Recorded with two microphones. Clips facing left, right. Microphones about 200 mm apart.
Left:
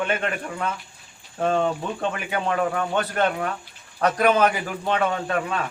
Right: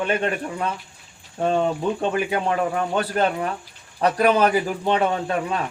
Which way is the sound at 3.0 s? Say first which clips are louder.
Right 1 dB; 30° right (ahead or behind).